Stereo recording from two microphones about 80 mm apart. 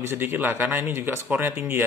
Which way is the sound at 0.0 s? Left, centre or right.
Right.